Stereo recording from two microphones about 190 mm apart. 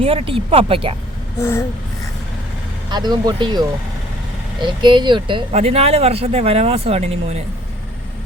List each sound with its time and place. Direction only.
0.0 s speech: 30° right (ahead or behind)
1.4 s a sound: 15° left (ahead or behind)
2.9 s speech: 20° right (ahead or behind)
4.6 s speech: 25° right (ahead or behind)